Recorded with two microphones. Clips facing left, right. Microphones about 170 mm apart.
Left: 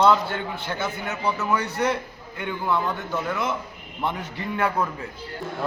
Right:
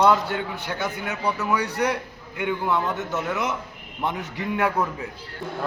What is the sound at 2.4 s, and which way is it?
A man's voice, 15° right (ahead or behind).